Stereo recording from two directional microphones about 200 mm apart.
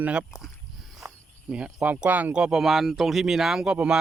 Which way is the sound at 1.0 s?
5° right (ahead or behind).